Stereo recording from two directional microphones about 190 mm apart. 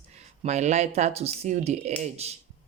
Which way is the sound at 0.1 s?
35° right (ahead or behind).